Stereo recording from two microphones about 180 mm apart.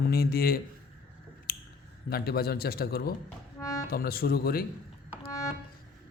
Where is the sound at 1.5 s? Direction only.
55° left (ahead or behind).